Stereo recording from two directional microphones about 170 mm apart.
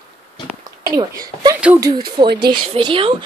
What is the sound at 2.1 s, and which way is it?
Speech, 25° right (ahead or behind).